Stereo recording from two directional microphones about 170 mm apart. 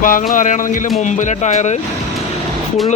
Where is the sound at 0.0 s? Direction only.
50° left (ahead or behind).